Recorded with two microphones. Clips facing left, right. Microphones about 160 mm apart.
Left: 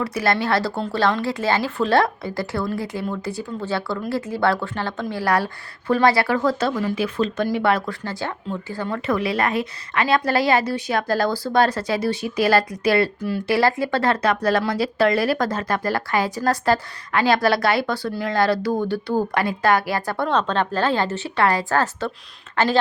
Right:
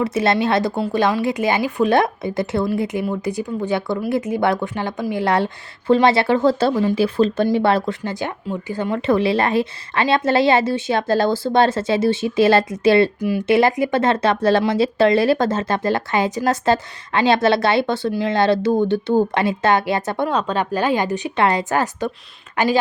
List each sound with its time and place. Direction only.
0.0 s speech: 25° right (ahead or behind)
13.1 s speech: 15° right (ahead or behind)
20.2 s speech: 10° right (ahead or behind)